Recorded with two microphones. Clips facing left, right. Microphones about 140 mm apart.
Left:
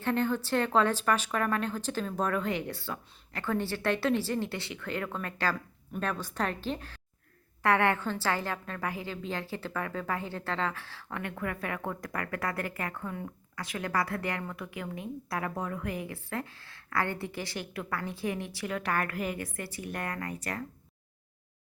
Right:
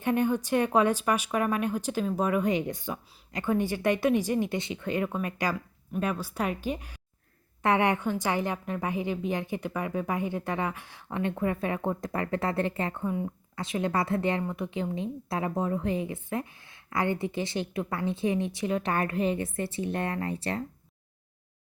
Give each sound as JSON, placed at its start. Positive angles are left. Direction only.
{"t": 0.0, "sound": "a woman's voice", "side_deg": -15}